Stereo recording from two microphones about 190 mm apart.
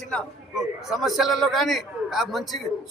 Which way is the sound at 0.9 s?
Centre (ahead or behind).